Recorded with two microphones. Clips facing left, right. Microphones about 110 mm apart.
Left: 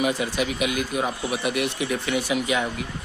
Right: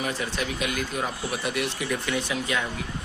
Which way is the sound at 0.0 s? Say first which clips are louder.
Left 5 dB; 15° left (ahead or behind).